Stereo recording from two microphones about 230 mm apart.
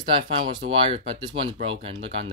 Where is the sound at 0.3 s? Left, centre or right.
Right.